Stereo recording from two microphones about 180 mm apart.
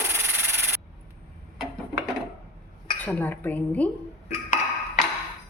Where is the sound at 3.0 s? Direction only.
10° left (ahead or behind).